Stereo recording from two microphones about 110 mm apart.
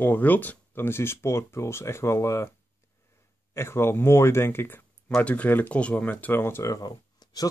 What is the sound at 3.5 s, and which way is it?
Speech, 25° left (ahead or behind).